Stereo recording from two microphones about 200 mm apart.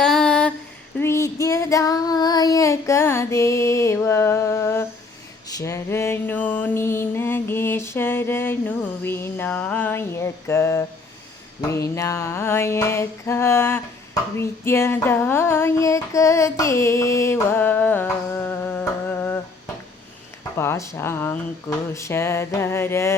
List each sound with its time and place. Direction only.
0.0 s a sound: 5° left (ahead or behind)
0.9 s child singing: 15° left (ahead or behind)
5.5 s mantra: 15° left (ahead or behind)
11.9 s mantra: 15° left (ahead or behind)
20.6 s speech: 15° left (ahead or behind)